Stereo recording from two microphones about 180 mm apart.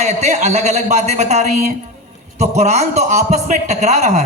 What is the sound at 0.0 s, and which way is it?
A man's voice, 40° right (ahead or behind).